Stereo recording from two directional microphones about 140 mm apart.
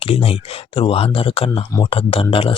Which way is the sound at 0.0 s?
45° left (ahead or behind).